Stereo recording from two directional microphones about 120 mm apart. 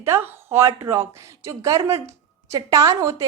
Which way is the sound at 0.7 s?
35° right (ahead or behind).